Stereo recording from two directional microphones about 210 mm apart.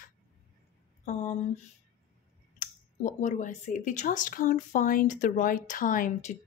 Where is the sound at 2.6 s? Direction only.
35° left (ahead or behind).